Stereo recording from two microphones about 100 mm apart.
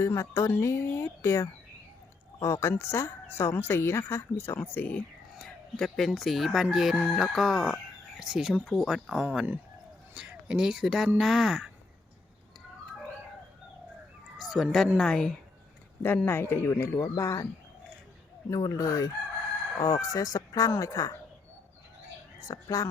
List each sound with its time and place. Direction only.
0.0 s speech: 25° left (ahead or behind)
5.4 s speech: 5° left (ahead or behind)
8.6 s speech: 10° left (ahead or behind)
8.9 s speech: 5° right (ahead or behind)
14.4 s speech: centre (ahead or behind)
16.0 s speech: 20° left (ahead or behind)
18.5 s speech: 35° left (ahead or behind)
22.4 s speech: 35° left (ahead or behind)